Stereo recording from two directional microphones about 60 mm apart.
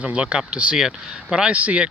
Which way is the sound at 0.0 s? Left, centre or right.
Centre.